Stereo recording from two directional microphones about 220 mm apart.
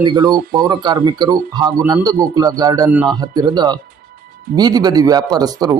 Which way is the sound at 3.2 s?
20° right (ahead or behind).